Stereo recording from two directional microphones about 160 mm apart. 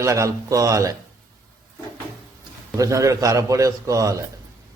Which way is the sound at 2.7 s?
20° right (ahead or behind).